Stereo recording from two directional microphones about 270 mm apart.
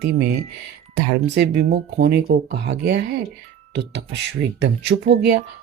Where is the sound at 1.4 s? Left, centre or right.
Right.